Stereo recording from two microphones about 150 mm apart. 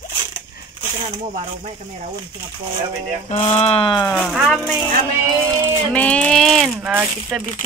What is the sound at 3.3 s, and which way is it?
Speech, 40° left (ahead or behind).